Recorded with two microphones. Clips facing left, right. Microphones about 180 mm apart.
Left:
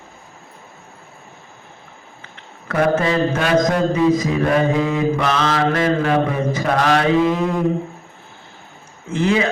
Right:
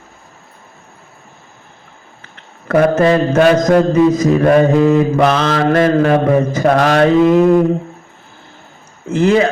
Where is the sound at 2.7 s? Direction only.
45° right (ahead or behind).